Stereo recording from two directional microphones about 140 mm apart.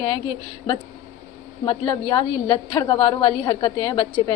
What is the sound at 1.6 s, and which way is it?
A woman's voice, 30° left (ahead or behind).